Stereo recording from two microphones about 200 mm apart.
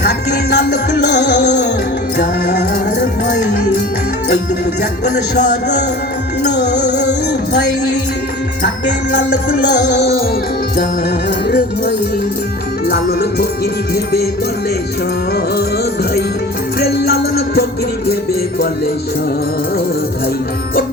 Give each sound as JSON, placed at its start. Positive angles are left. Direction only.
{"t": 0.0, "sound": "music", "side_deg": 55}
{"t": 4.8, "sound": "music", "side_deg": 55}
{"t": 9.1, "sound": "music", "side_deg": 60}
{"t": 11.4, "sound": "music", "side_deg": 55}
{"t": 16.8, "sound": "music", "side_deg": 50}